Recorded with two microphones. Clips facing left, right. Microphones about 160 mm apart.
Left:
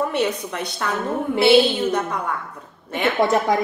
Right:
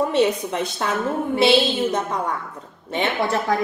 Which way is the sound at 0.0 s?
20° right (ahead or behind).